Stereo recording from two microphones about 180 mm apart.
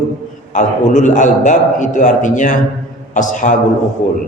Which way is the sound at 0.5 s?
40° left (ahead or behind).